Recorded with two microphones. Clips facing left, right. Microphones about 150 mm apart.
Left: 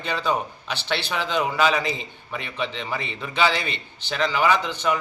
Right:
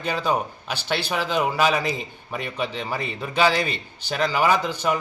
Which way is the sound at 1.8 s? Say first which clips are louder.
Right 2 dB; 45° right (ahead or behind).